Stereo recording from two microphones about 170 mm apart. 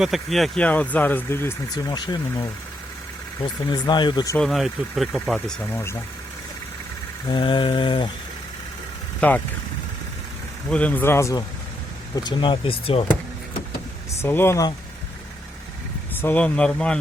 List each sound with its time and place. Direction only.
0.0 s speech: centre (ahead or behind); by 4.4 s 25° left (ahead or behind)
4.4 s speech: centre (ahead or behind)
7.3 s speech: 30° left (ahead or behind)
9.2 s speech: 10° left (ahead or behind)
10.7 s speech: 10° left (ahead or behind); by 13.1 s 35° left (ahead or behind)
14.2 s speech: 15° left (ahead or behind)
16.1 s speech: 10° left (ahead or behind)